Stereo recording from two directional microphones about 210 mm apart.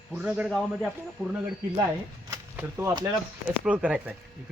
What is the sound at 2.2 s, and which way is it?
Speech, 15° right (ahead or behind).